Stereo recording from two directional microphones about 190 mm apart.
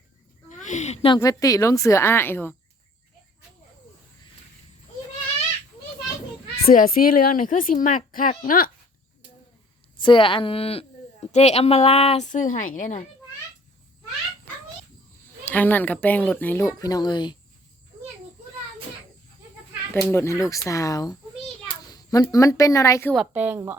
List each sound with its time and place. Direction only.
0.4 s a sound: 40° left (ahead or behind)
1.1 s speech: 20° left (ahead or behind)
6.7 s a woman's voice: 45° left (ahead or behind)
10.0 s a woman's voice: 25° left (ahead or behind); by 13.1 s 45° left (ahead or behind)
15.4 s speech: 10° left (ahead or behind)
20.0 s speech: 10° left (ahead or behind)
23.1 s a woman's voice: 5° right (ahead or behind)